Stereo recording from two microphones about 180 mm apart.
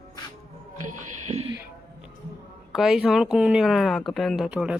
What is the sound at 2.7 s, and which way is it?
Speech, centre (ahead or behind).